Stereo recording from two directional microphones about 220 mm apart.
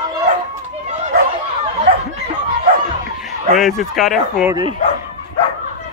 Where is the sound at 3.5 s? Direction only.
Centre (ahead or behind).